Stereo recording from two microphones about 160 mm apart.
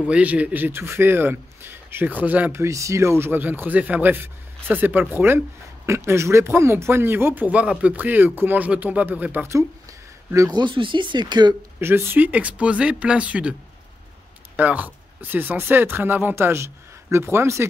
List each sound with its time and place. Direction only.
0.1 s a man's voice: 10° right (ahead or behind); by 11.5 s 30° right (ahead or behind)
11.8 s a man's voice: 15° right (ahead or behind)
14.6 s a man's voice: 10° right (ahead or behind)